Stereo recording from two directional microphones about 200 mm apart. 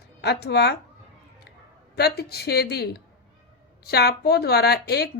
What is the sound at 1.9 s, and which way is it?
Speech, 55° left (ahead or behind).